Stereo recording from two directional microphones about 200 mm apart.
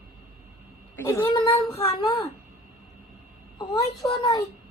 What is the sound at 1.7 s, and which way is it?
Speech, 30° left (ahead or behind).